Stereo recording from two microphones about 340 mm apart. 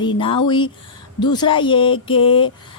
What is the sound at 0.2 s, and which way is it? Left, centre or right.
Speech, centre.